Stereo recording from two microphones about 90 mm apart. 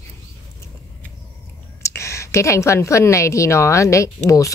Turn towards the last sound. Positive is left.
turn(degrees=35)  # may be behind; listen again after turning